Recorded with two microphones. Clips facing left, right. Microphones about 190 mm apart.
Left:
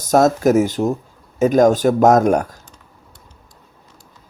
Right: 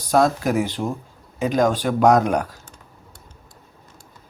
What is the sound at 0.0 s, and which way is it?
Speech, 45° left (ahead or behind).